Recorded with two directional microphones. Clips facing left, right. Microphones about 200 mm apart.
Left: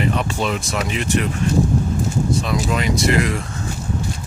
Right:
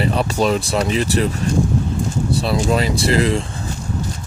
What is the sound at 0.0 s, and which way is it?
Speech, 35° right (ahead or behind).